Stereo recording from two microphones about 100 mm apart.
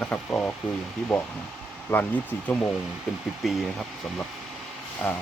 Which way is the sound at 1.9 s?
25° left (ahead or behind).